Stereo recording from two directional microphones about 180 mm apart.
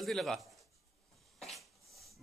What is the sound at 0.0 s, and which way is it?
Speech, centre (ahead or behind).